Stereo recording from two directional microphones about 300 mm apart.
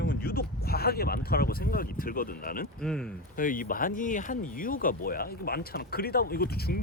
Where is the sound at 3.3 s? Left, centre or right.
Left.